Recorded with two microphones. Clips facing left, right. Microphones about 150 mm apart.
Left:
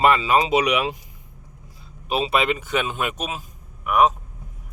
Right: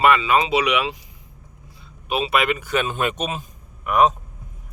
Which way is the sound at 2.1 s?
30° left (ahead or behind).